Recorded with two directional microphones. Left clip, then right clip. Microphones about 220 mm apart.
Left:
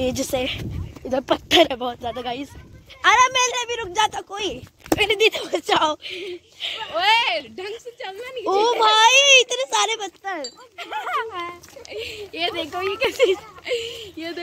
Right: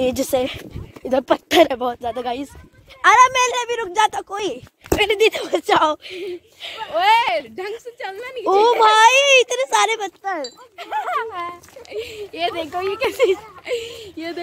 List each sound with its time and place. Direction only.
0.0 s speech: 20° right (ahead or behind)
6.6 s speech: 5° right (ahead or behind)
6.9 s speech: 35° right (ahead or behind); by 10.3 s 15° right (ahead or behind)
10.8 s speech: 45° right (ahead or behind)
11.9 s speech: 50° right (ahead or behind)